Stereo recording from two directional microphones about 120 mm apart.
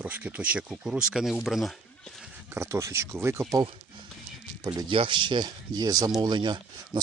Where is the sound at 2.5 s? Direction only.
25° right (ahead or behind).